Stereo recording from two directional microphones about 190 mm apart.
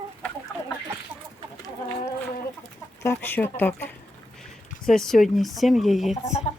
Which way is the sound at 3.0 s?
10° left (ahead or behind).